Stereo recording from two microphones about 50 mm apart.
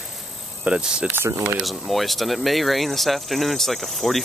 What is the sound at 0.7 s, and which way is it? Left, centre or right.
Cricket, centre.